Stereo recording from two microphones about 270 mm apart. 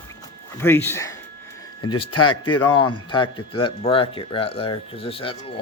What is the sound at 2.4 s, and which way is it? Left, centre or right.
Speech, centre.